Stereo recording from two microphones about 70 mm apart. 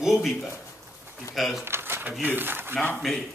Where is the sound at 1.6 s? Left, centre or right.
Right.